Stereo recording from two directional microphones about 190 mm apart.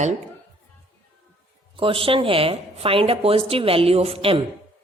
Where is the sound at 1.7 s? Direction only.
25° right (ahead or behind).